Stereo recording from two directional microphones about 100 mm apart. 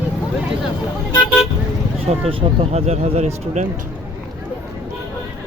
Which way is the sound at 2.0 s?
90° right.